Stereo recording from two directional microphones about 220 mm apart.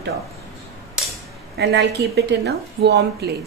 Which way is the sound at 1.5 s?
50° right (ahead or behind).